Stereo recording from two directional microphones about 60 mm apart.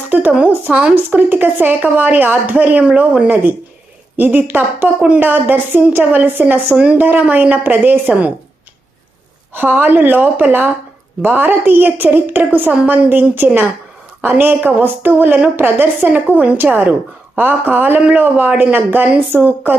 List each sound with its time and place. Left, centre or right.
0.1 s speech: right
0.9 s speech: right
4.2 s a man's voice: right
4.9 s a man's voice: right
9.6 s a man's voice: right